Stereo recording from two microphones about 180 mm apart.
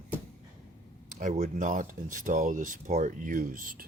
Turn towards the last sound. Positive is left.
turn(degrees=-50)  # may be behind; listen again after turning